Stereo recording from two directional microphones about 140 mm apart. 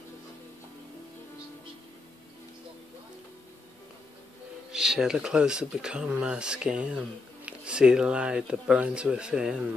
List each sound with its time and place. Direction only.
4.7 s speech: 5° right (ahead or behind)